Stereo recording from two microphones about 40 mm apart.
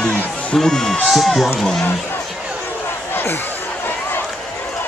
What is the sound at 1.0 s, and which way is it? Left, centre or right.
Speech, centre.